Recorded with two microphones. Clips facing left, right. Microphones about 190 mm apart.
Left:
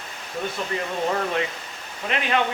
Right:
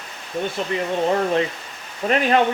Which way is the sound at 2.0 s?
40° right (ahead or behind).